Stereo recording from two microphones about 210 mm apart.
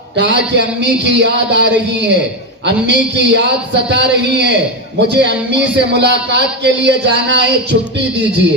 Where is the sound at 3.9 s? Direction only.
55° right (ahead or behind).